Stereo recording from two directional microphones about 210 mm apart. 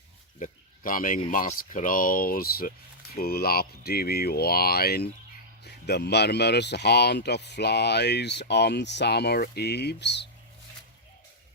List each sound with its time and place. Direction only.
0.3 s speech: 40° left (ahead or behind); by 10.2 s 55° left (ahead or behind)